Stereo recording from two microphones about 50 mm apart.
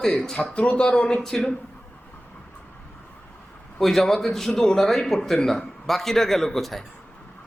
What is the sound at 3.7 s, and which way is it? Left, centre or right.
Speech, centre.